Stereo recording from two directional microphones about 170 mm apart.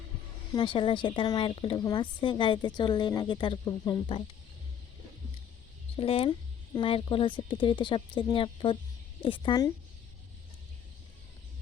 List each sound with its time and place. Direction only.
0.5 s a woman's voice: 30° left (ahead or behind)
6.0 s a woman's voice: 35° left (ahead or behind)